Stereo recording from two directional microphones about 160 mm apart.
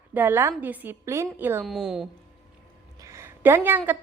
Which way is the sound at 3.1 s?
15° right (ahead or behind).